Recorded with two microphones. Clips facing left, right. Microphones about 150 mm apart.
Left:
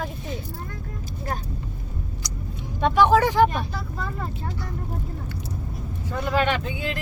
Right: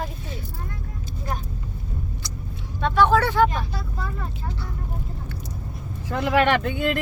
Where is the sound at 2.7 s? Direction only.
15° left (ahead or behind).